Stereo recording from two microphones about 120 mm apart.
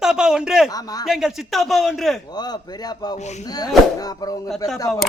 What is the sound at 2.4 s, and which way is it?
Speech, 35° left (ahead or behind).